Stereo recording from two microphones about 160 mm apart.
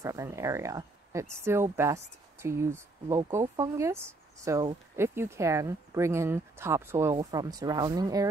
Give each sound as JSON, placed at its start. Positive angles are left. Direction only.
{"t": 0.0, "sound": "speech", "side_deg": -20}